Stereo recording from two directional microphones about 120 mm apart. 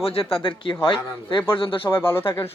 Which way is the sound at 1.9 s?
20° left (ahead or behind).